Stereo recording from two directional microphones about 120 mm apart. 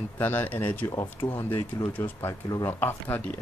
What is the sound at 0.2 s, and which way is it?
Speech, 15° left (ahead or behind).